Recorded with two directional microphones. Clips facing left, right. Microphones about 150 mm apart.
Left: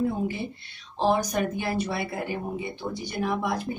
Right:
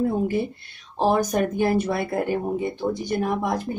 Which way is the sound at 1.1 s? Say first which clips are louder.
Right 4 dB; 50° right (ahead or behind).